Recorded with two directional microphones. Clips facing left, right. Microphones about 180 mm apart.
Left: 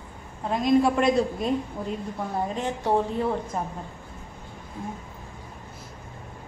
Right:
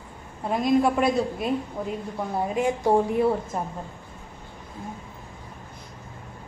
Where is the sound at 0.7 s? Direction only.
5° right (ahead or behind).